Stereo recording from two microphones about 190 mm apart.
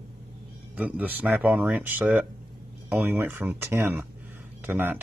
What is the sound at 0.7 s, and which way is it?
Speech, 10° right (ahead or behind).